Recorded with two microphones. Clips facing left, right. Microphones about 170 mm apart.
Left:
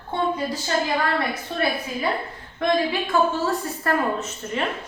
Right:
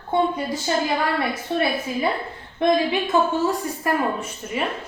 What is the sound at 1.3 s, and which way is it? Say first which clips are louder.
A woman's voice: right 2 dB; 25° right (ahead or behind).